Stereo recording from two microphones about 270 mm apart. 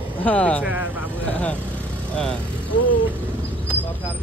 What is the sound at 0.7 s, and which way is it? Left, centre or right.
Speech, centre.